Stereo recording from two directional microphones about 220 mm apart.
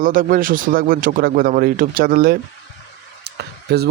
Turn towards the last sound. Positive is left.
turn(degrees=-50)  # may be behind; listen again after turning